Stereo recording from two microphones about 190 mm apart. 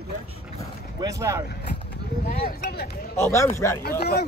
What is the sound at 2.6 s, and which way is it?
Speech, 55° left (ahead or behind).